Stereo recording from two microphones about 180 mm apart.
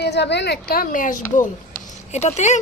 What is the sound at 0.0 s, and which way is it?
A woman's voice, 70° left (ahead or behind).